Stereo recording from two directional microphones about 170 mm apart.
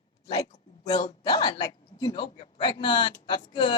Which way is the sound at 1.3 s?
25° left (ahead or behind).